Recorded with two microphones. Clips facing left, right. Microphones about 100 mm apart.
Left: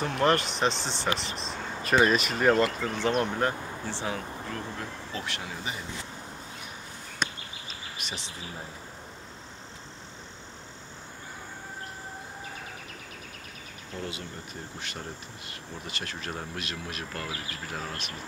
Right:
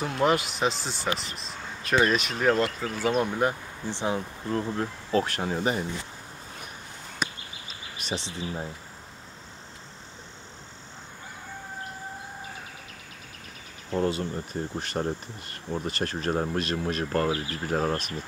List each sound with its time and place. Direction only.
0.0 s speech: 5° right (ahead or behind); by 5.9 s 45° right (ahead or behind)
7.2 s a sound: 5° right (ahead or behind)
8.0 s speech: 35° right (ahead or behind)
13.9 s speech: 40° right (ahead or behind)